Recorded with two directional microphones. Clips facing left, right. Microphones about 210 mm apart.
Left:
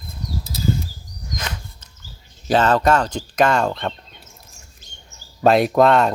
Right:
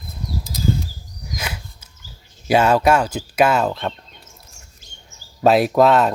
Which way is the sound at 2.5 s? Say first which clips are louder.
Right 1 dB; 10° right (ahead or behind).